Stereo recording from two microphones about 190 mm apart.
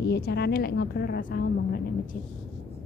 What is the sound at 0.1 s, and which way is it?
Speech, 60° left (ahead or behind).